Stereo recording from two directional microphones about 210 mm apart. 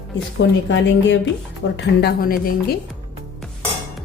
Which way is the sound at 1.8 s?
45° left (ahead or behind).